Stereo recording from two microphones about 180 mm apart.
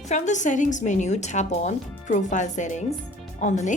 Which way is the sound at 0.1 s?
40° left (ahead or behind).